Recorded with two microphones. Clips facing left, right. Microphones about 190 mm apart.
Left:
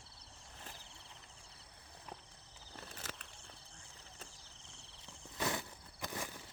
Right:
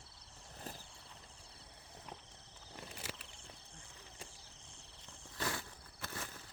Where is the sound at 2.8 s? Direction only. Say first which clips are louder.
Right 1 dB; 10° right (ahead or behind).